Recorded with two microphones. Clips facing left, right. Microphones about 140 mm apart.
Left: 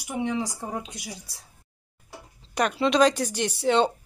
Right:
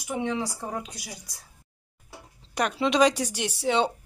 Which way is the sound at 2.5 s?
5° right (ahead or behind).